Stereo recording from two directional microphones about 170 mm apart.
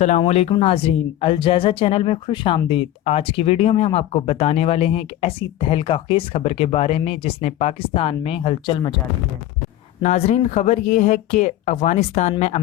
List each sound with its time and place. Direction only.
0.2 s speech: 35° left (ahead or behind)
10.0 s speech: 40° left (ahead or behind)